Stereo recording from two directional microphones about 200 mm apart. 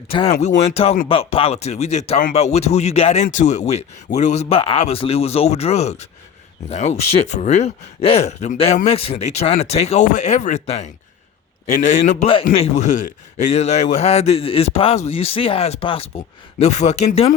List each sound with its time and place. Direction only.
0.1 s speech: 25° left (ahead or behind)